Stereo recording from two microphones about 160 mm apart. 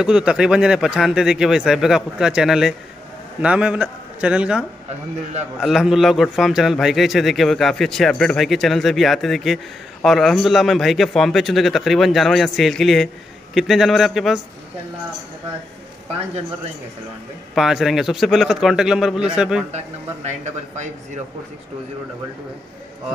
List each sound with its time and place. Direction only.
0.0 s a man's voice: 5° right (ahead or behind)
17.6 s speech: centre (ahead or behind)
20.2 s speech: 45° right (ahead or behind)